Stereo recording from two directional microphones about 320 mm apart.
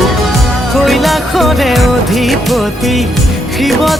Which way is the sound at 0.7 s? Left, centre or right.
Centre.